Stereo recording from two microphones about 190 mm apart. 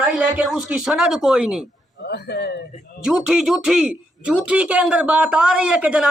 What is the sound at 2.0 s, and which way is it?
Speech, 60° left (ahead or behind).